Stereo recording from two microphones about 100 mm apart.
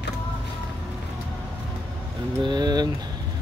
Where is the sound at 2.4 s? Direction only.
50° right (ahead or behind).